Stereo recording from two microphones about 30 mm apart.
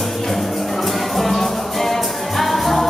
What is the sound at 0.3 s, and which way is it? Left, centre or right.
Music, centre.